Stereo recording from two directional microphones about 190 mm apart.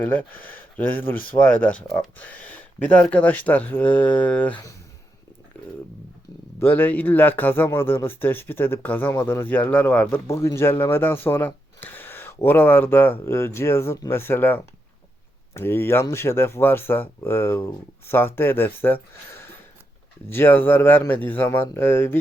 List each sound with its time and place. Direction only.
0.0 s speech: 10° left (ahead or behind)
6.6 s speech: 10° left (ahead or behind)
20.3 s speech: 10° left (ahead or behind)